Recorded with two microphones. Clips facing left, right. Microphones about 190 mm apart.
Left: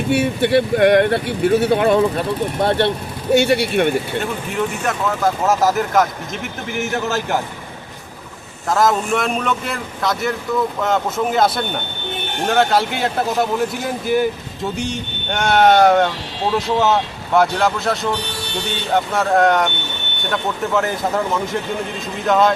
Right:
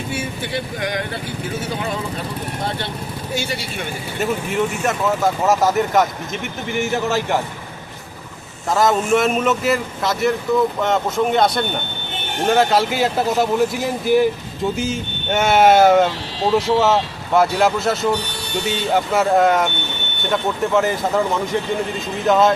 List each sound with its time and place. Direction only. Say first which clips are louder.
0.1 s speech: left 13 dB; 65° left (ahead or behind)
4.2 s a man's voice: right 2 dB; centre (ahead or behind)
8.7 s a man's voice: right 1 dB; centre (ahead or behind)